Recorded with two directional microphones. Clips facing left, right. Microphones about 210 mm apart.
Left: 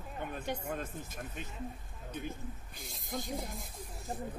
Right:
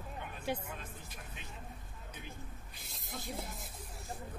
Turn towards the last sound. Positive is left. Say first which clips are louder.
# left 3 dB
turn(degrees=-5)  # may be behind; listen again after turning